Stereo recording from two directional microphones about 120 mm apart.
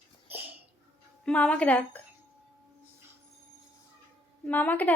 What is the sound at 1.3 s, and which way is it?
Speech, 10° left (ahead or behind).